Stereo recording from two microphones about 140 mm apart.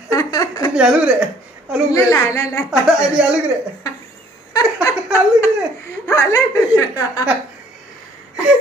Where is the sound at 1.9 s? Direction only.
20° left (ahead or behind).